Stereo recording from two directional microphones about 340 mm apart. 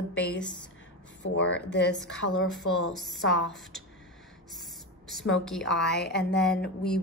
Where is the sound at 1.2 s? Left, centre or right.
Left.